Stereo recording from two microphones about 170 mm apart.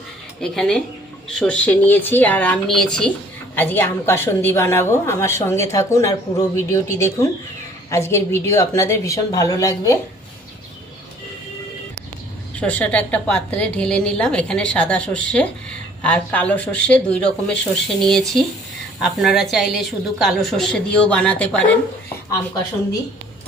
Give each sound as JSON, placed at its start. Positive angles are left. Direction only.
{"t": 0.3, "sound": "a woman's voice", "side_deg": 0}
{"t": 12.5, "sound": "a woman's voice", "side_deg": 10}